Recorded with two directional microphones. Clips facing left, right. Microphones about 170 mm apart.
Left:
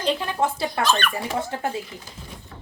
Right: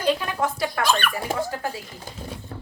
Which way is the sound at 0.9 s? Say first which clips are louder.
Even; 10° right (ahead or behind).